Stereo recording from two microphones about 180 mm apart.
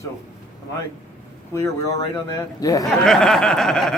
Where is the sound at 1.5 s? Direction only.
15° left (ahead or behind).